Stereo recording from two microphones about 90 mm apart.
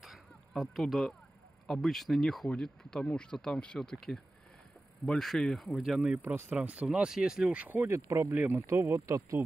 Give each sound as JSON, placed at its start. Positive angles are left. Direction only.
{"t": 0.0, "sound": "a sound", "side_deg": 0}
{"t": 1.7, "sound": "speech", "side_deg": 0}
{"t": 5.8, "sound": "speech", "side_deg": -5}
{"t": 7.9, "sound": "speech", "side_deg": -30}
{"t": 8.4, "sound": "speech", "side_deg": -20}
{"t": 8.6, "sound": "speech", "side_deg": -30}